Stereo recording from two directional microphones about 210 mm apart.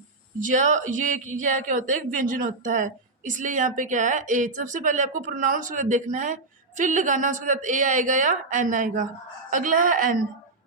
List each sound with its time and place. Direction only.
0.3 s a woman's voice: 35° right (ahead or behind)